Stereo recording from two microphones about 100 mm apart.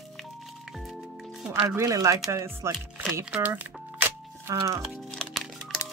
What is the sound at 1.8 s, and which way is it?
Speech, 35° right (ahead or behind).